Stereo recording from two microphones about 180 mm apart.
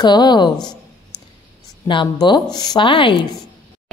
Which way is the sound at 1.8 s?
25° left (ahead or behind).